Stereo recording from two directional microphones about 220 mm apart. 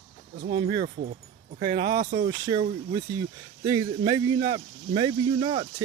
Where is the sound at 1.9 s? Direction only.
45° right (ahead or behind).